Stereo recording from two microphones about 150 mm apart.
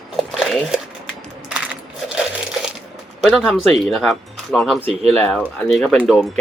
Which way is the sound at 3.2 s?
5° left (ahead or behind).